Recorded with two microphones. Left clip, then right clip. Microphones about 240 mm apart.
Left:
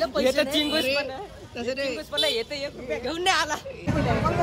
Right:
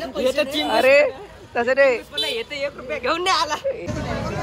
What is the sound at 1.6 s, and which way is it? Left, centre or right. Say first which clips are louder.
Speech: right 12 dB; right.